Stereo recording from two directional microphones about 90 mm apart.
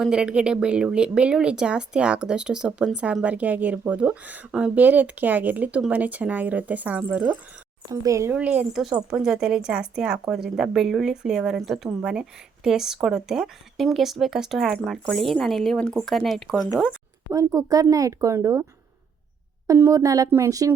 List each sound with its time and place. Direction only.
0.0 s speech: 10° right (ahead or behind)
7.9 s speech: 40° right (ahead or behind)
8.3 s speech: 15° right (ahead or behind)
17.3 s speech: 40° right (ahead or behind)
19.6 s speech: 35° right (ahead or behind)